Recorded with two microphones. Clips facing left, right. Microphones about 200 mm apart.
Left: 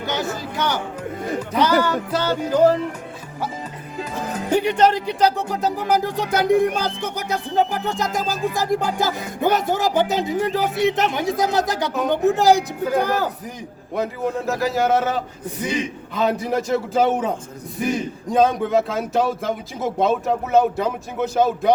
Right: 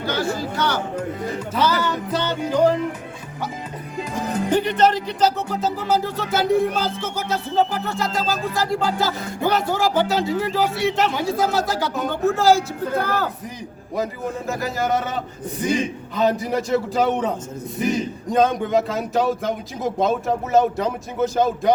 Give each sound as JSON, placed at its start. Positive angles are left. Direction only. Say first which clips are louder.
{"t": 0.0, "sound": "speech", "louder": "right 1 dB", "side_deg": 20}
{"t": 0.5, "sound": "music", "louder": "right 1 dB", "side_deg": 20}
{"t": 4.3, "sound": "music", "louder": "even", "side_deg": 5}
{"t": 13.9, "sound": "speech", "louder": "left 2 dB", "side_deg": 0}